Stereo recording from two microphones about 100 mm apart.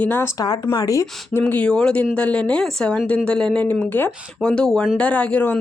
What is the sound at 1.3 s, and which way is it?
Speech, 15° left (ahead or behind).